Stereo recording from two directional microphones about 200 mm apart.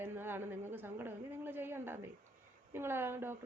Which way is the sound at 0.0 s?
10° right (ahead or behind).